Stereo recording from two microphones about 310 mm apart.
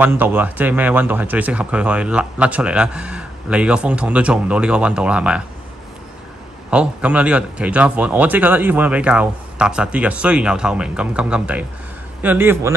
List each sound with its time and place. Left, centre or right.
0.0 s speech: centre
6.7 s a man's voice: centre